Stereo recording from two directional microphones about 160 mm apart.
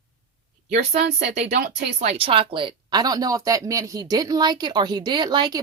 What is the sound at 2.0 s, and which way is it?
Speech, 40° right (ahead or behind).